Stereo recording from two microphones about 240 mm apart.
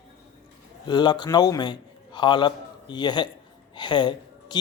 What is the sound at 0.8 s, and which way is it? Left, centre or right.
A man's voice, centre.